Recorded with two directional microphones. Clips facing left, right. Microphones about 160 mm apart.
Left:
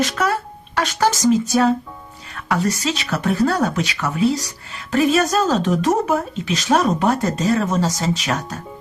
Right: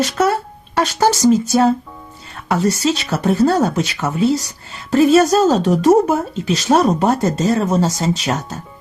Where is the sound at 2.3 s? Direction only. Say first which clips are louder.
Right 3 dB; 30° right (ahead or behind).